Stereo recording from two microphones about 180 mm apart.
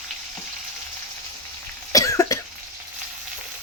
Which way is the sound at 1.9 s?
20° left (ahead or behind).